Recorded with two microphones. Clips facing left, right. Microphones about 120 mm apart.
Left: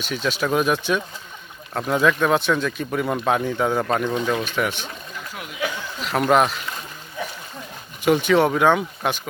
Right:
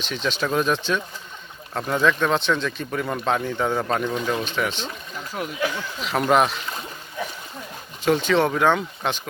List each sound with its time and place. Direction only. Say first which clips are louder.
0.0 s speech: left 2 dB; 5° left (ahead or behind)
4.0 s speech: left 2 dB; 15° left (ahead or behind)
8.0 s speech: left 2 dB; 10° left (ahead or behind)